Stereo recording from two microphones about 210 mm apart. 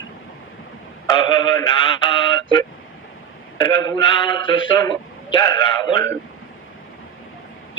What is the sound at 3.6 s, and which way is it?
A man's voice, 15° left (ahead or behind).